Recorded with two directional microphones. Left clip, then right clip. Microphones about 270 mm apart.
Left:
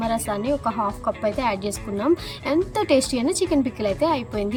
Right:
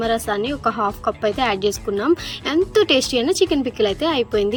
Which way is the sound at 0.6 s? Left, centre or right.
Right.